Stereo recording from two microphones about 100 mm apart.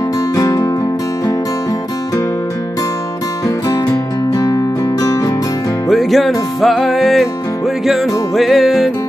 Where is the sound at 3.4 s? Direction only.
40° left (ahead or behind).